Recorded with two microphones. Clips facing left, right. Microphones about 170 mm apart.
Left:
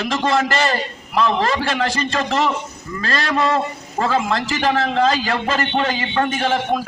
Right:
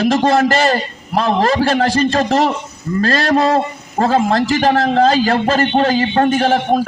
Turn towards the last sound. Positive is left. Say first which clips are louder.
# right 6 dB
turn(degrees=-40)  # may be behind; listen again after turning